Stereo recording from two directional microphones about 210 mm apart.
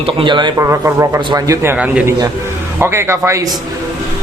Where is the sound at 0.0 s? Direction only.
25° right (ahead or behind).